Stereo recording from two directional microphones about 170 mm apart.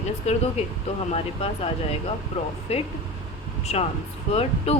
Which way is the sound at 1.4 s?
35° left (ahead or behind).